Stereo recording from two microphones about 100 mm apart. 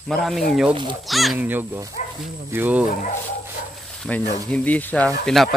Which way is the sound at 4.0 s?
15° left (ahead or behind).